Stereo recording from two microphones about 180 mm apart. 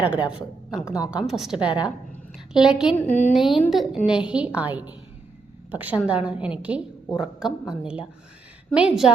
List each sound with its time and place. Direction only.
0.0 s a woman's voice: 5° right (ahead or behind)
1.6 s a woman's voice: 25° left (ahead or behind)
2.5 s a woman's voice: 5° right (ahead or behind)
3.1 s a woman's voice: 10° left (ahead or behind)
3.3 s a woman's voice: centre (ahead or behind)